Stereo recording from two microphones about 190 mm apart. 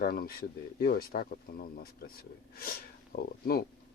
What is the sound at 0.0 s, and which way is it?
Speech, 50° left (ahead or behind).